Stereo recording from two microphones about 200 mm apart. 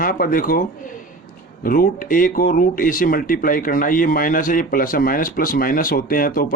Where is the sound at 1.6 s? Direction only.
45° left (ahead or behind).